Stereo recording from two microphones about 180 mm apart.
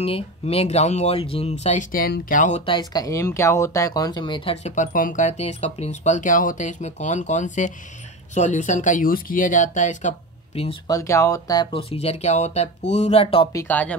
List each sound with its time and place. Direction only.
0.0 s speech: 35° left (ahead or behind)
2.6 s speech: 25° left (ahead or behind)
4.6 s speech: 45° left (ahead or behind)
10.9 s speech: 15° left (ahead or behind)
13.5 s speech: 15° left (ahead or behind)